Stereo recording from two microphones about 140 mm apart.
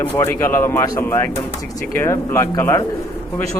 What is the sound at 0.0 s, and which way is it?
Speech, 15° left (ahead or behind).